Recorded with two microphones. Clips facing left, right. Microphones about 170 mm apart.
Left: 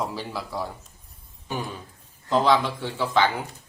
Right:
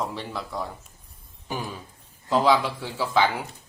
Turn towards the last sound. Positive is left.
turn(degrees=-5)  # may be behind; listen again after turning